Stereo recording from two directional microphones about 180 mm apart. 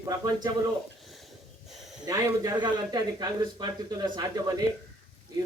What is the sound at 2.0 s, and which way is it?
A man's voice, 20° right (ahead or behind).